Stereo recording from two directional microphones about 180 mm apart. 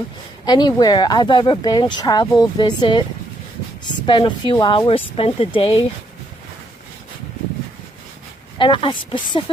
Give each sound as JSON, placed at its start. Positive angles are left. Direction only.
{"t": 0.4, "sound": "speech", "side_deg": 25}
{"t": 8.5, "sound": "speech", "side_deg": 30}